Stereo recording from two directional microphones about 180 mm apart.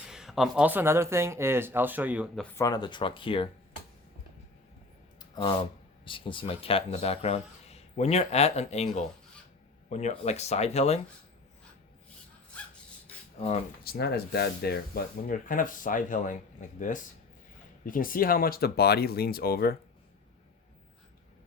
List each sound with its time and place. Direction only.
0.0 s speech: 5° right (ahead or behind)
2.6 s speech: 20° left (ahead or behind)
5.2 s a sound: 25° left (ahead or behind)
6.1 s speech: 30° left (ahead or behind)
13.8 s speech: 60° left (ahead or behind)